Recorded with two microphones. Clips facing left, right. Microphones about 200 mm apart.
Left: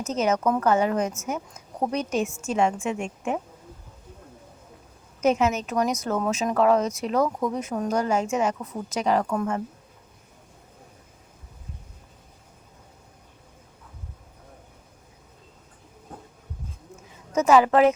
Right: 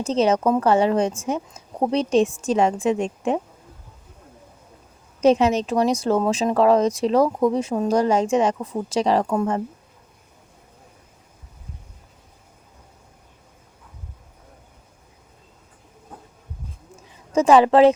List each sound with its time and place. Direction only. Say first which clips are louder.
0.0 s speech: right 5 dB; 30° right (ahead or behind)
5.2 s speech: right 5 dB; 35° right (ahead or behind)
17.3 s a woman's voice: right 4 dB; 30° right (ahead or behind)